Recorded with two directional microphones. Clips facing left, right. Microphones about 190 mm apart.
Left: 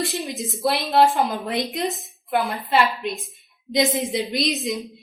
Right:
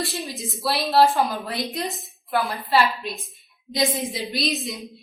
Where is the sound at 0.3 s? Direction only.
20° left (ahead or behind).